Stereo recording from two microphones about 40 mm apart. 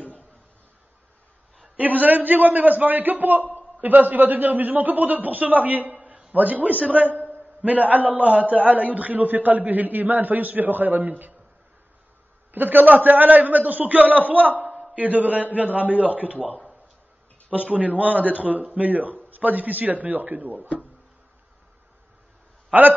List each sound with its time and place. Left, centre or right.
0.0 s a sound: left
1.8 s a man's voice: right
6.0 s a man's voice: right
12.5 s a man's voice: right
14.7 s a sound: centre
15.0 s a man's voice: right
22.7 s a man's voice: right